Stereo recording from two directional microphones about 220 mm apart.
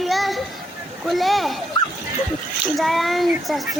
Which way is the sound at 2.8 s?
Centre (ahead or behind).